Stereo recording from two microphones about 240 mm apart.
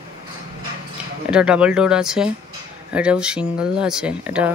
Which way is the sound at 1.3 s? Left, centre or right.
Centre.